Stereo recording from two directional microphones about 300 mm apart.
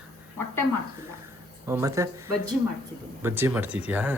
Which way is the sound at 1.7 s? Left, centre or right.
Centre.